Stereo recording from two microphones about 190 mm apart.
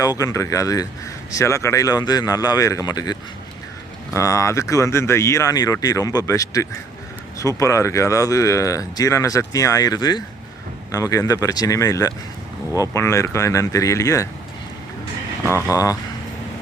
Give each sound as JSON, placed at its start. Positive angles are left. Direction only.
{"t": 0.0, "sound": "speech", "side_deg": 20}
{"t": 15.4, "sound": "speech", "side_deg": -10}
{"t": 15.7, "sound": "speech", "side_deg": 20}